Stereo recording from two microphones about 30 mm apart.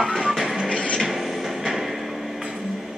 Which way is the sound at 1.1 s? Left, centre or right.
Centre.